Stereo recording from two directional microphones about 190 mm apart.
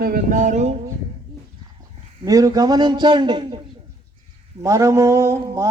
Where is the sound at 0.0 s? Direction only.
45° right (ahead or behind).